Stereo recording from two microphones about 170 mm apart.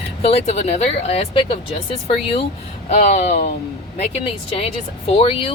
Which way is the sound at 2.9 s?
50° left (ahead or behind).